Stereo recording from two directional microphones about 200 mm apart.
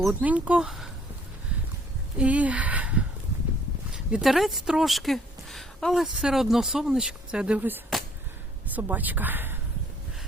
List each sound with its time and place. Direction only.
0.0 s speech: 5° right (ahead or behind)
2.1 s speech: 5° right (ahead or behind)